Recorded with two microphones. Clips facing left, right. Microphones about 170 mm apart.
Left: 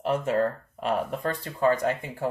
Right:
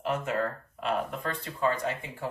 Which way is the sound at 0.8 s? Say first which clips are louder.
Left 3 dB; 45° left (ahead or behind).